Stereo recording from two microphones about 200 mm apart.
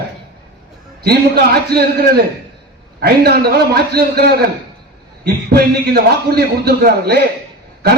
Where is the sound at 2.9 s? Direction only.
50° right (ahead or behind).